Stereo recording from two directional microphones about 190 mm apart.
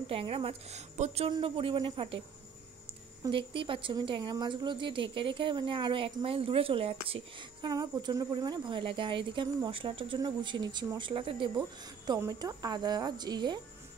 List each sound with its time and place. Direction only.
0.1 s a woman's voice: 30° right (ahead or behind)
3.3 s speech: 25° right (ahead or behind)